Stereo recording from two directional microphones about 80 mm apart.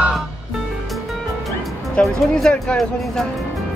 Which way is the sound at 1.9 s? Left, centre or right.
Centre.